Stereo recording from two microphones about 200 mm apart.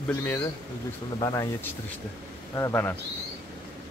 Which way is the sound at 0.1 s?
10° left (ahead or behind).